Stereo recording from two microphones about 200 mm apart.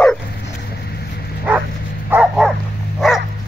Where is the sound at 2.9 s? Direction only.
Centre (ahead or behind).